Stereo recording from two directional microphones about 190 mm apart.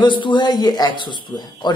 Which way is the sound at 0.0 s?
25° left (ahead or behind).